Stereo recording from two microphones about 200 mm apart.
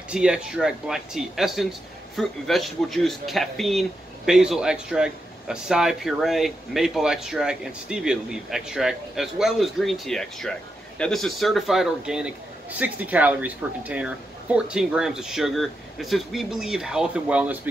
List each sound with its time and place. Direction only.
0.1 s a man's voice: 5° right (ahead or behind)